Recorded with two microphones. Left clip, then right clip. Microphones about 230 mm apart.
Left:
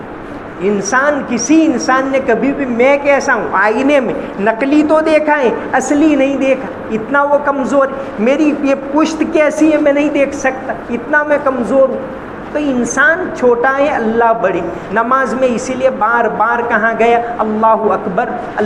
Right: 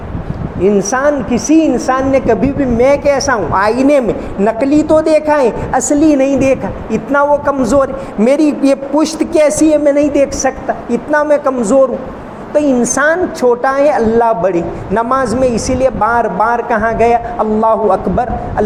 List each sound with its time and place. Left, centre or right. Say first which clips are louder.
0.6 s a woman's voice: right 1 dB; right